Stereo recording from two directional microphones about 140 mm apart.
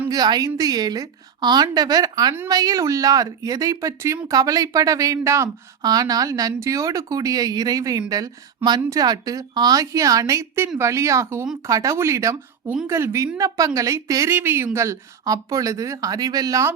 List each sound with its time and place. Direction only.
0.1 s speech: 30° right (ahead or behind)